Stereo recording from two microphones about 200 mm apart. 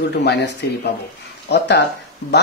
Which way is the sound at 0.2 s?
55° left (ahead or behind).